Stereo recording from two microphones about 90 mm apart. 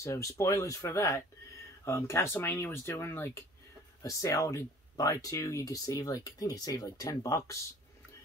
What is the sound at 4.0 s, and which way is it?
A man's voice, 40° left (ahead or behind).